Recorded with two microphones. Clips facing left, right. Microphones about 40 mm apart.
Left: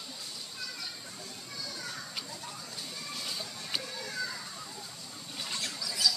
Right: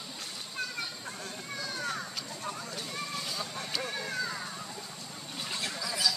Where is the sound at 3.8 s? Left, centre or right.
Right.